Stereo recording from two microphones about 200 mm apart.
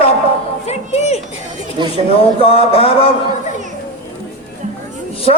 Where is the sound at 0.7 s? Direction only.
35° left (ahead or behind).